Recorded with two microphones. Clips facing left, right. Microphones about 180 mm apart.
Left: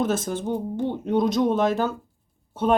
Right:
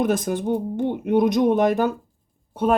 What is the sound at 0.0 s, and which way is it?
Speech, 15° right (ahead or behind).